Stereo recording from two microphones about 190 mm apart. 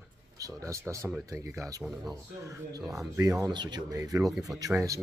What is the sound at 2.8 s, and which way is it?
Speech, centre (ahead or behind).